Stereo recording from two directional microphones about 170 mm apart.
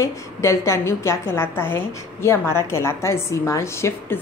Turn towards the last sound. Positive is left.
turn(degrees=15)  # may be behind; listen again after turning